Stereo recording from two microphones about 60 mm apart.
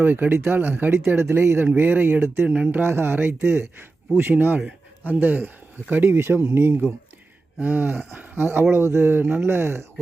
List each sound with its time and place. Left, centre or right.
0.0 s speech: right
6.1 s speech: right
7.6 s speech: right
8.7 s speech: right